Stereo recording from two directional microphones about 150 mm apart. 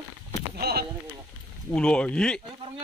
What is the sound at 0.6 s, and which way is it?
Speech, 90° right.